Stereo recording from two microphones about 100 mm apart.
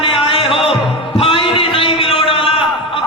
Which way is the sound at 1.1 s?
65° left (ahead or behind).